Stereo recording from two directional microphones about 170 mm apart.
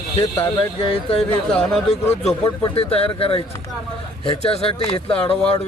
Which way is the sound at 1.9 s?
40° left (ahead or behind).